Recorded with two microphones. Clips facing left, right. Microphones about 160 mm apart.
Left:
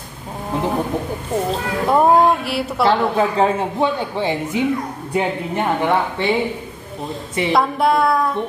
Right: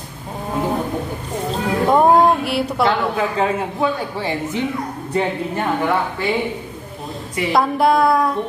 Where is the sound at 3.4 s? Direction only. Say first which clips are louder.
Left 2 dB; 30° left (ahead or behind).